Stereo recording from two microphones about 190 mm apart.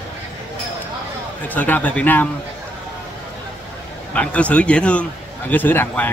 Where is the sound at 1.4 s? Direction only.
10° left (ahead or behind).